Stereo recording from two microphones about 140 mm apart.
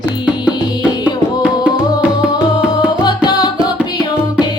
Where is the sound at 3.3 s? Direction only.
30° left (ahead or behind).